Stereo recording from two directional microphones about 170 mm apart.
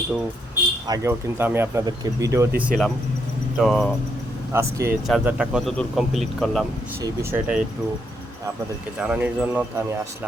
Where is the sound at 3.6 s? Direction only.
Centre (ahead or behind).